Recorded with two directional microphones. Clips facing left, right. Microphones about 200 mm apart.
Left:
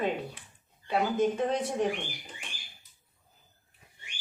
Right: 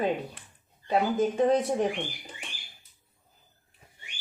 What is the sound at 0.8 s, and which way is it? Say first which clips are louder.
Speech: right 2 dB; 35° right (ahead or behind).